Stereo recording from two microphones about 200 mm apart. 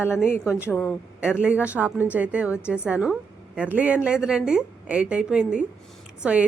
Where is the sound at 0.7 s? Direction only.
10° left (ahead or behind).